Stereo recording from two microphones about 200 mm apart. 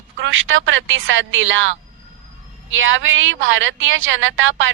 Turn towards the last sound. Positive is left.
turn(degrees=-75)  # may be behind; listen again after turning